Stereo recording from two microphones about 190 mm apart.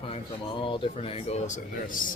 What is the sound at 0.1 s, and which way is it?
Speech, 25° left (ahead or behind).